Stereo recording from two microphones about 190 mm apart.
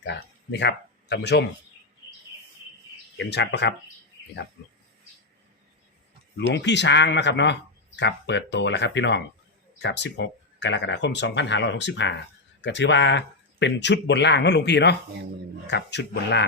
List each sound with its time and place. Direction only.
0.0 s speech: 65° left (ahead or behind)
3.2 s speech: 65° left (ahead or behind)
6.3 s speech: 65° left (ahead or behind)